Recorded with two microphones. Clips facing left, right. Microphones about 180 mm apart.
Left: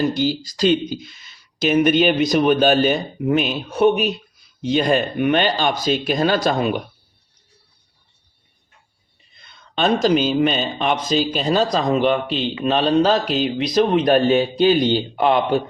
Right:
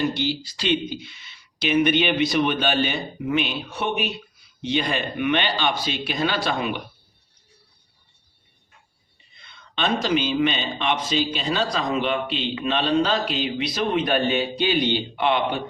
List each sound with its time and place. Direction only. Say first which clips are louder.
0.1 s a man's voice: left 5 dB; 40° left (ahead or behind)
9.4 s a man's voice: left 6 dB; 45° left (ahead or behind)